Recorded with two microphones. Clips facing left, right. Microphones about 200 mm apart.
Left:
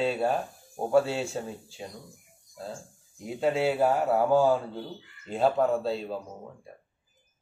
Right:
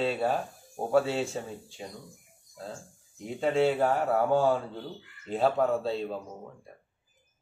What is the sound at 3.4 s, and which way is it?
A man's voice, 5° left (ahead or behind).